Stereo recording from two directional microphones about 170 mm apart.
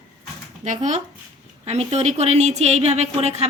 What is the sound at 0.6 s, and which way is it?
A woman's voice, 45° right (ahead or behind).